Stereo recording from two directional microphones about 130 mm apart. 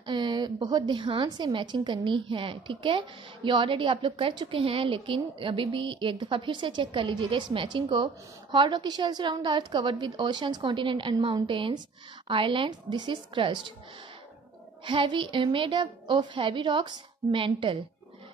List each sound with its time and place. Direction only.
0.0 s a woman's voice: 35° right (ahead or behind)
14.9 s a woman's voice: 40° right (ahead or behind)